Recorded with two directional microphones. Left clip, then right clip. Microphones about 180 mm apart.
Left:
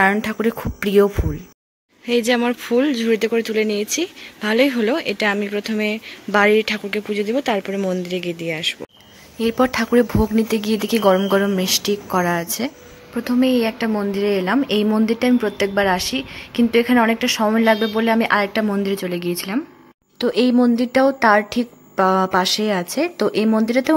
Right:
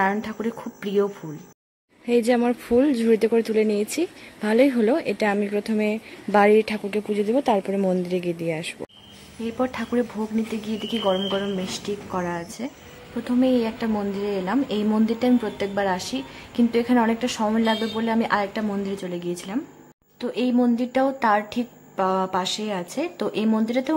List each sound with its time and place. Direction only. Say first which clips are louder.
0.0 s speech: left 7 dB; 20° left (ahead or behind)
2.0 s speech: left 2 dB; 5° right (ahead or behind)
9.4 s speech: left 8 dB; 30° left (ahead or behind)
20.2 s speech: left 7 dB; 30° left (ahead or behind)